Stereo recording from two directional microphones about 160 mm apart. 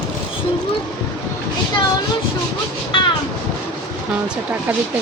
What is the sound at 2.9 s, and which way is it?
Train, 30° left (ahead or behind).